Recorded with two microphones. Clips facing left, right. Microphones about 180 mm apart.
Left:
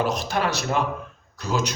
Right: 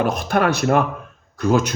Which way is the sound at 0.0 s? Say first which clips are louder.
Right 5 dB; 55° right (ahead or behind).